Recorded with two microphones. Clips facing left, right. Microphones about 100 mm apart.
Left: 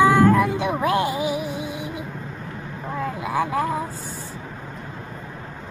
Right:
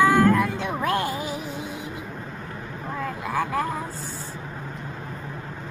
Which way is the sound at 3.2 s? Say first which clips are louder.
Left 2 dB; 15° left (ahead or behind).